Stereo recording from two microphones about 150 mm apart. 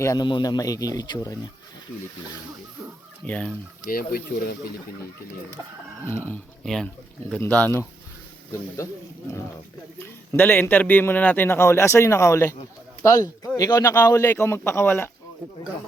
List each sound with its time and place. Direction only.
0.0 s speech: 25° left (ahead or behind)
3.2 s a man's voice: 10° left (ahead or behind)
3.8 s speech: 80° left
6.1 s a man's voice: 15° left (ahead or behind)
10.3 s a man's voice: 15° left (ahead or behind)